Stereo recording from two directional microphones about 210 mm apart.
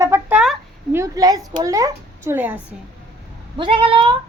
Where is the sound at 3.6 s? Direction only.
25° right (ahead or behind).